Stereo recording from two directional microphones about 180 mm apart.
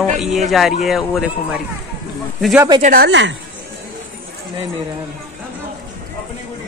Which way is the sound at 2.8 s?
50° right (ahead or behind).